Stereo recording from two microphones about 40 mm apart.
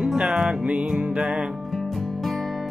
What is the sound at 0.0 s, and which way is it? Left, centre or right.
Music, centre.